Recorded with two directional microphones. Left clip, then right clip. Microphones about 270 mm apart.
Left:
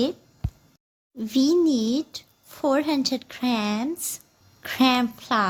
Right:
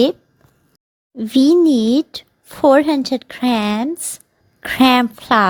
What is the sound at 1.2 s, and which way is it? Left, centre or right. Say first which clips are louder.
A woman's voice: right 8 dB; right.